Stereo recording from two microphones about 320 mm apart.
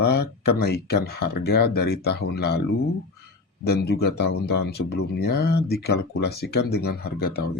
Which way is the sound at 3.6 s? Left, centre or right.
Left.